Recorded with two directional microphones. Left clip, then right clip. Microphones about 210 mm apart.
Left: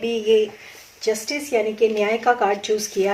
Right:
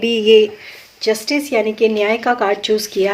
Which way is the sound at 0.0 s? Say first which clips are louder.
Right 7 dB; 50° right (ahead or behind).